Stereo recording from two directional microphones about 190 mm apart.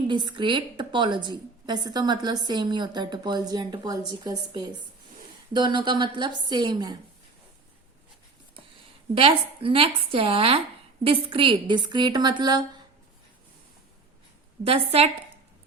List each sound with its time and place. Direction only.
0.1 s a woman's voice: 25° right (ahead or behind)
9.1 s a woman's voice: 30° right (ahead or behind)
14.6 s a woman's voice: 30° right (ahead or behind)